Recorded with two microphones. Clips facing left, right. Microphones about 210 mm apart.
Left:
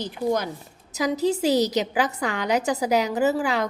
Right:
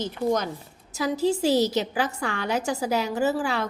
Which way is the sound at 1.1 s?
20° left (ahead or behind).